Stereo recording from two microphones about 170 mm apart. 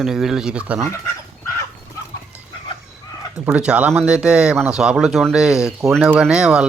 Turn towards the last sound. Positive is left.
turn(degrees=-5)  # may be behind; listen again after turning